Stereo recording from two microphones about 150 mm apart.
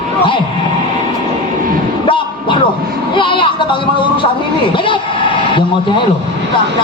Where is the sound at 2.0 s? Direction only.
35° left (ahead or behind).